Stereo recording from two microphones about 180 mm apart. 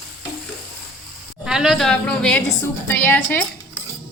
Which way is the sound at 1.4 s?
5° right (ahead or behind).